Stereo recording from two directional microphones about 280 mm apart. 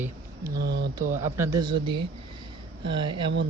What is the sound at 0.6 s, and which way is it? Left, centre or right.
Speech, right.